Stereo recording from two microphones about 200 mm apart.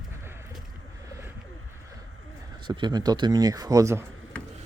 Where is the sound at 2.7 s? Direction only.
20° right (ahead or behind).